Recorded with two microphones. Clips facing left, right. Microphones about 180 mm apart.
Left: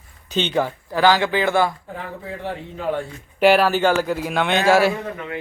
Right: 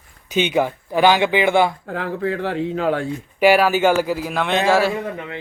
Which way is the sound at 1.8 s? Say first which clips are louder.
Right 9 dB; 90° right.